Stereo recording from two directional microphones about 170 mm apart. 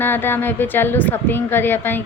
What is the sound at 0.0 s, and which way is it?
Speech, 10° left (ahead or behind).